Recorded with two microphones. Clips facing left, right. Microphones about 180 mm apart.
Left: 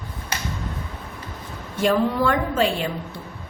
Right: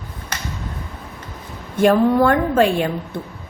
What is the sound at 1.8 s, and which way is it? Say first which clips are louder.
A woman's voice: right 6 dB; 55° right (ahead or behind).